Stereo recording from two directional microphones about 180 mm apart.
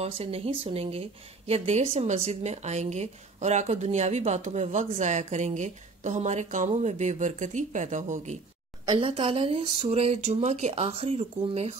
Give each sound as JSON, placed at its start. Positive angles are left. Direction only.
{"t": 0.0, "sound": "a woman's voice", "side_deg": -35}
{"t": 8.8, "sound": "a woman's voice", "side_deg": -30}